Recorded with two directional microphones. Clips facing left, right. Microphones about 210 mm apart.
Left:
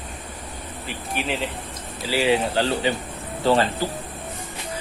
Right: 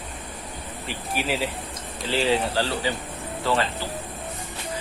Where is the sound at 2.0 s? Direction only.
10° left (ahead or behind).